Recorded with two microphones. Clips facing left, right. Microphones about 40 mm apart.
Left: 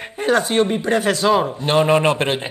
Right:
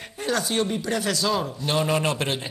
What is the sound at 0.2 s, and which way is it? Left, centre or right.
Speech, left.